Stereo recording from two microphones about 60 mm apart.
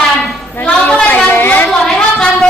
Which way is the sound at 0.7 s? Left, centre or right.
Centre.